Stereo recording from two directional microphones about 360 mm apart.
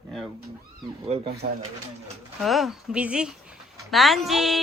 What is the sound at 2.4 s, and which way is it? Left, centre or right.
Speech, centre.